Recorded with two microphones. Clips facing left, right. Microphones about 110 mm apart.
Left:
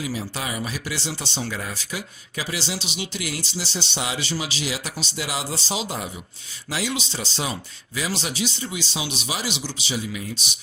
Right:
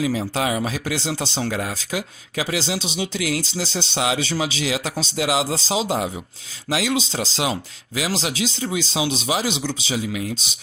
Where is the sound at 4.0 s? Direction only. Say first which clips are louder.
Right 7 dB; 90° right.